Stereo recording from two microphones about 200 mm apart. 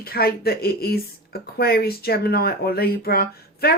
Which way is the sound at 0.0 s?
50° left (ahead or behind).